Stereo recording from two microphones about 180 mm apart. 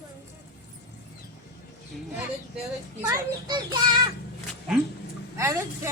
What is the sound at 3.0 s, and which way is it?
Speech, 20° right (ahead or behind).